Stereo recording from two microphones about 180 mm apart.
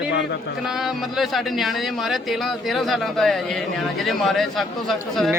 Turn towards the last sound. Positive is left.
turn(degrees=0)  # may be behind; listen again after turning